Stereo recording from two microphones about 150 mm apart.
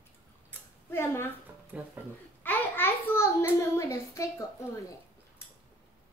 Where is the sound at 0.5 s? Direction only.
10° right (ahead or behind).